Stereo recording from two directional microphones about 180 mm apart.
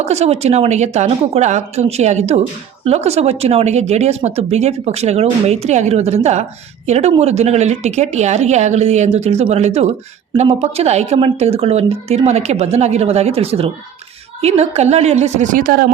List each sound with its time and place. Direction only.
0.0 s speech: 35° right (ahead or behind); by 15.9 s 50° right (ahead or behind)